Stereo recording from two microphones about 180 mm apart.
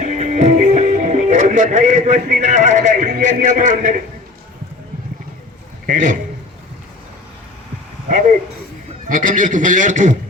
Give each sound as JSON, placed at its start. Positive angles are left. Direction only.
{"t": 0.0, "sound": "speech", "side_deg": -40}
{"t": 5.8, "sound": "a man's voice", "side_deg": -45}
{"t": 9.1, "sound": "a man's voice", "side_deg": -45}